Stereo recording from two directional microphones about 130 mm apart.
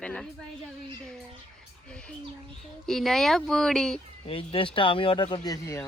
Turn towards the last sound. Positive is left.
turn(degrees=25)  # may be behind; listen again after turning